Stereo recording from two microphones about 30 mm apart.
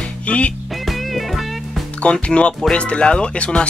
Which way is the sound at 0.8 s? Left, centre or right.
Centre.